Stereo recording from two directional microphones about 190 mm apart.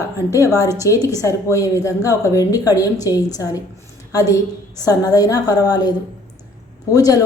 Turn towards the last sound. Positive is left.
turn(degrees=20)  # may be behind; listen again after turning